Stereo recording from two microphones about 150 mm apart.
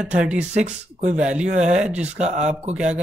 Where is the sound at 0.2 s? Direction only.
5° right (ahead or behind).